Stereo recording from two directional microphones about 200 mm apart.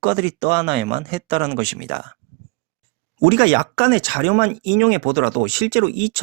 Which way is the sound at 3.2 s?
25° right (ahead or behind).